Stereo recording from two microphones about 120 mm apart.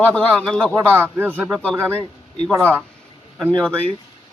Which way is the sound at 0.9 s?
15° right (ahead or behind).